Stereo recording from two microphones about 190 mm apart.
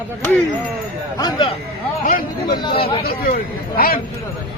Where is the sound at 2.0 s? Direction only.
50° left (ahead or behind).